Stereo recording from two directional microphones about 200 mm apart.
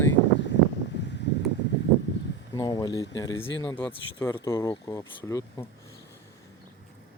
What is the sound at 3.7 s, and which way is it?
Speech, 10° left (ahead or behind).